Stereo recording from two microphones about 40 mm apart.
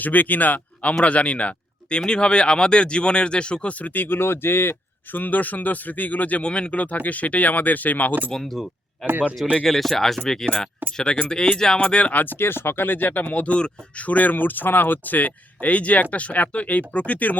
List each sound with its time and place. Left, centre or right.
0.0 s speech: left
5.2 s speech: left
6.4 s speech: left
8.3 s speech: centre
9.6 s speech: centre
10.4 s speech: left
11.8 s speech: left
12.1 s speech: left